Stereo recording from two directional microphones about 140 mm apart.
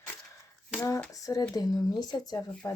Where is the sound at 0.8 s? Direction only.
20° left (ahead or behind).